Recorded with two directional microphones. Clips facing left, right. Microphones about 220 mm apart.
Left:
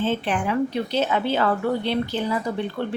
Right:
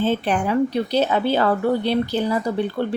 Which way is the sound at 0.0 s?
40° right (ahead or behind).